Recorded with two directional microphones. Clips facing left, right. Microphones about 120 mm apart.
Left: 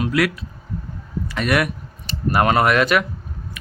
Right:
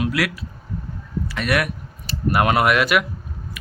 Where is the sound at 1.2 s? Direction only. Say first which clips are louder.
Left 2 dB; centre (ahead or behind).